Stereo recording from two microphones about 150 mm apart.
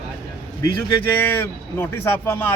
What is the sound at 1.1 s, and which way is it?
Speech, 15° left (ahead or behind).